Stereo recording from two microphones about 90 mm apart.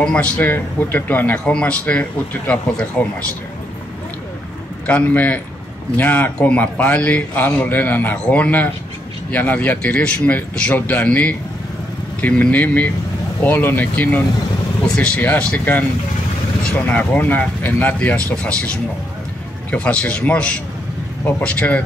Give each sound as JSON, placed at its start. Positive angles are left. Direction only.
{"t": 0.0, "sound": "a man's voice", "side_deg": 10}
{"t": 4.8, "sound": "a man's voice", "side_deg": 15}
{"t": 19.7, "sound": "speech", "side_deg": 15}